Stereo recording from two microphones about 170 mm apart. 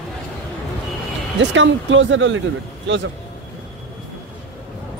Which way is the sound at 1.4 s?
90° right.